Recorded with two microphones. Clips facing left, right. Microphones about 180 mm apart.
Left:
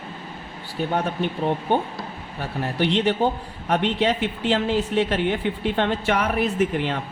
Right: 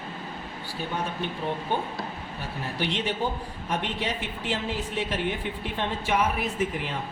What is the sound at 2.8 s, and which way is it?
A man's voice, 65° left (ahead or behind).